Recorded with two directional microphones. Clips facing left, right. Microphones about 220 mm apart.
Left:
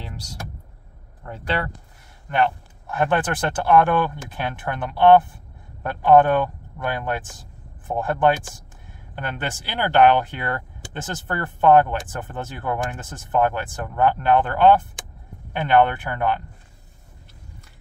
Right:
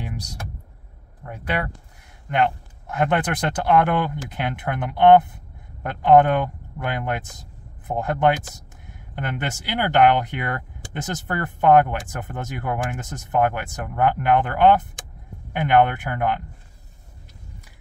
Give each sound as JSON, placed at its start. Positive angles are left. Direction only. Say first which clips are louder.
{"t": 1.2, "sound": "speech", "louder": "left 1 dB", "side_deg": -15}